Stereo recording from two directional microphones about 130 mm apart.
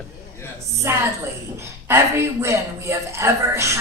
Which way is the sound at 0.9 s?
20° right (ahead or behind).